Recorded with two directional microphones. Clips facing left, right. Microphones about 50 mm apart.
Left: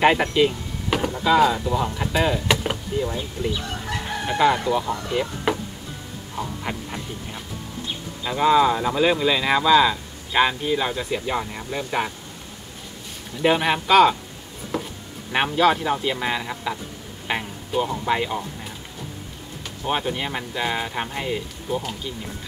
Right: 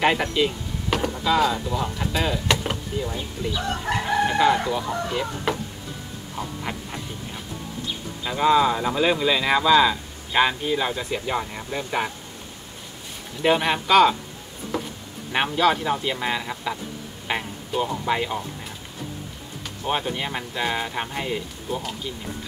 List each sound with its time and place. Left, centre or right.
0.0 s speech: centre
3.9 s chicken: right
4.3 s speech: centre
5.5 s music: centre
6.3 s speech: centre
13.4 s speech: centre
14.7 s a sound: centre
15.3 s speech: centre
19.8 s speech: centre